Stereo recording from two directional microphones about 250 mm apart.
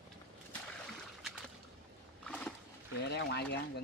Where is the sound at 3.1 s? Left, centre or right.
Left.